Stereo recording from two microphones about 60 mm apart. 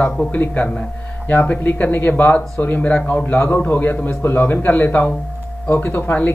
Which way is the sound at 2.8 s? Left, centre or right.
Left.